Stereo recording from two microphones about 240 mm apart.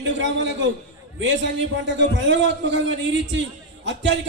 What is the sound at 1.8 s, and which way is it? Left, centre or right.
A man's voice, right.